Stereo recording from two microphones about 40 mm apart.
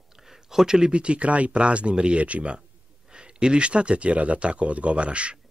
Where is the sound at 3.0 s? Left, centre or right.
Right.